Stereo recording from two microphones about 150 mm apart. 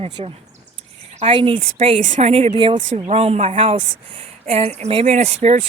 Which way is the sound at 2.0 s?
55° right (ahead or behind).